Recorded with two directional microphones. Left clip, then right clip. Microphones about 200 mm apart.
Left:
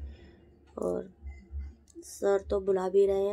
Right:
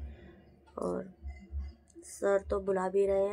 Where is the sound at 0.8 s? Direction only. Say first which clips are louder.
Left 3 dB; 10° left (ahead or behind).